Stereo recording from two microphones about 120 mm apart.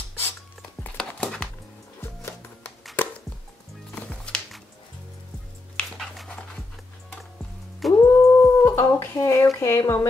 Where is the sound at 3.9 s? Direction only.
10° left (ahead or behind).